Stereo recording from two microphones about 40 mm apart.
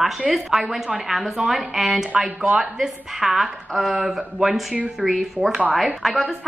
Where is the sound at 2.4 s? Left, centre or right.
Right.